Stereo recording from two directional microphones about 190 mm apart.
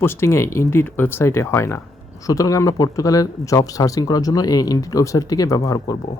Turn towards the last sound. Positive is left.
turn(degrees=15)  # may be behind; listen again after turning